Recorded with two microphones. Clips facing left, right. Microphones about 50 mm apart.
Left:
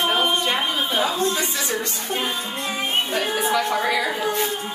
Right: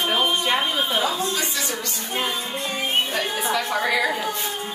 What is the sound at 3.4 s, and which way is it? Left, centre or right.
Speech, centre.